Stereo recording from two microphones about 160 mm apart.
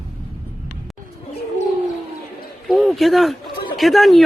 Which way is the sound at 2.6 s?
Centre (ahead or behind).